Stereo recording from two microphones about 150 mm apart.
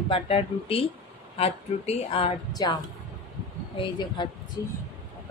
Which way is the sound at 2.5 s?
25° left (ahead or behind).